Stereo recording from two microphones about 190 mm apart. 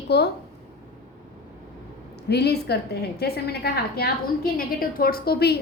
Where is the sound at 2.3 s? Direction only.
60° left (ahead or behind).